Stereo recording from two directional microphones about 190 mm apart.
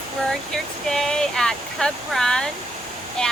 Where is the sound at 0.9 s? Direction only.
5° left (ahead or behind).